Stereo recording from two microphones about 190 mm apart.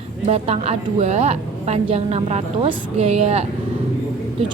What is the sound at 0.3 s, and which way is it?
A woman's voice, 35° right (ahead or behind).